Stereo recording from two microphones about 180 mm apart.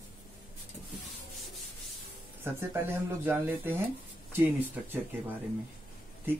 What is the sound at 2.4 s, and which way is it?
Speech, 10° right (ahead or behind).